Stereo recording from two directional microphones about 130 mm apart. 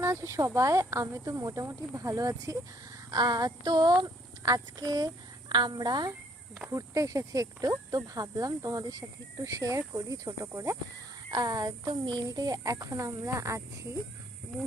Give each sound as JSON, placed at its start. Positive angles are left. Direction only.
{"t": 0.0, "sound": "speech", "side_deg": -20}